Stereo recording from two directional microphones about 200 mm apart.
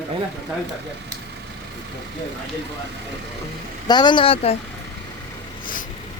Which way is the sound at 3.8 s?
20° left (ahead or behind).